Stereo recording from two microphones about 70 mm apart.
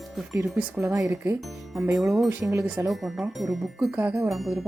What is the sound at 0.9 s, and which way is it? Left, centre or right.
Speech, right.